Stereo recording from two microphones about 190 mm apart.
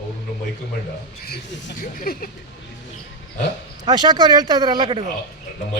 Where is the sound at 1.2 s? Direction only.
65° left (ahead or behind).